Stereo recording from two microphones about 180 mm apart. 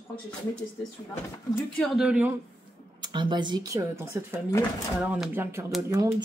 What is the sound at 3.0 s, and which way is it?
Speech, 25° right (ahead or behind).